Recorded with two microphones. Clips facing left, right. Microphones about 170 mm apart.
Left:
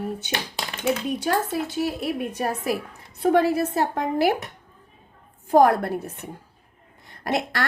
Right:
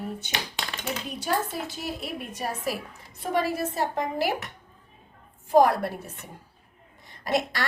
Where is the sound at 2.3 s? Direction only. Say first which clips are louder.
Left 5 dB; 60° left (ahead or behind).